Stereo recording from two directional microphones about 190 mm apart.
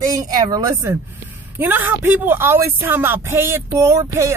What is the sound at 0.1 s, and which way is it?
Speech, 20° right (ahead or behind).